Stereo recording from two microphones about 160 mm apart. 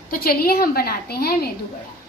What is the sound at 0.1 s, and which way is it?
A woman's voice, 70° left (ahead or behind).